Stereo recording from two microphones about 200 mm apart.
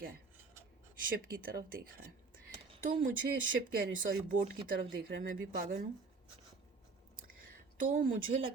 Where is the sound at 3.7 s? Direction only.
45° right (ahead or behind).